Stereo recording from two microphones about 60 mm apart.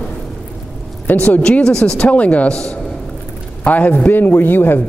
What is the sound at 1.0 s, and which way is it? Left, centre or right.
Speech, left.